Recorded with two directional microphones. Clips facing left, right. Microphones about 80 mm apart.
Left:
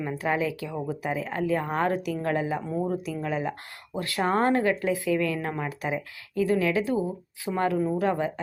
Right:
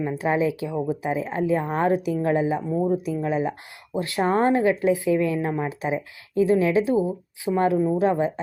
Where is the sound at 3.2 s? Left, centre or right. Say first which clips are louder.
Right 5 dB; centre.